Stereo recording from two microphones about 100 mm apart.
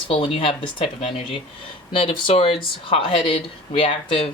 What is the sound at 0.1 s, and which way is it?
Speech, 70° left (ahead or behind).